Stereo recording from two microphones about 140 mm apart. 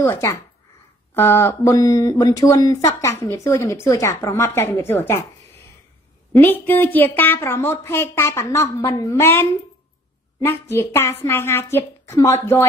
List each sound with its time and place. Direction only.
0.0 s speech: 20° left (ahead or behind)
6.3 s a woman's voice: 15° left (ahead or behind)